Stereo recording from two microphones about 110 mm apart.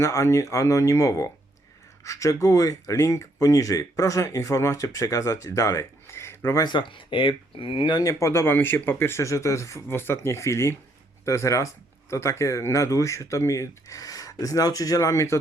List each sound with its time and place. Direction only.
0.0 s speech: 30° left (ahead or behind)
6.7 s speech: 45° left (ahead or behind); by 15.4 s 25° left (ahead or behind)